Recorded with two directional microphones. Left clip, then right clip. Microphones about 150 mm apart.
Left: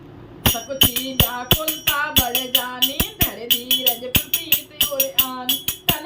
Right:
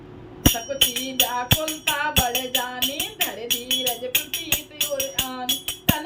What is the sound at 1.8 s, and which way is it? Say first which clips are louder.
Music: left 2 dB; 5° left (ahead or behind).